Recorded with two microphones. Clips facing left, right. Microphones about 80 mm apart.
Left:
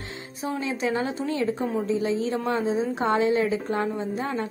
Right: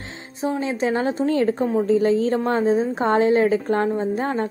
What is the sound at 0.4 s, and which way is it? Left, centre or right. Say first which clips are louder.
A woman's voice: right 5 dB; right.